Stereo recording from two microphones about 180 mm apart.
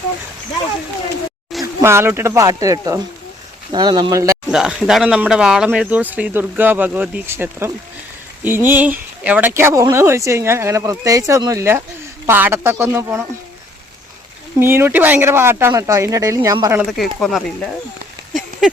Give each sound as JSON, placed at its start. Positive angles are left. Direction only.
{"t": 1.6, "sound": "speech", "side_deg": -15}
{"t": 4.5, "sound": "speech", "side_deg": 0}
{"t": 14.6, "sound": "speech", "side_deg": -10}
{"t": 17.0, "sound": "speech", "side_deg": 0}